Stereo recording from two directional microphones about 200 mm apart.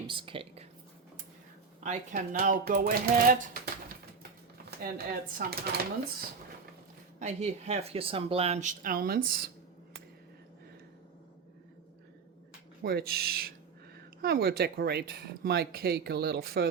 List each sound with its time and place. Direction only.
0.1 s speech: 25° right (ahead or behind)
1.8 s speech: 35° right (ahead or behind)
4.8 s speech: 45° right (ahead or behind)
7.2 s speech: 35° right (ahead or behind)
12.8 s speech: 50° right (ahead or behind)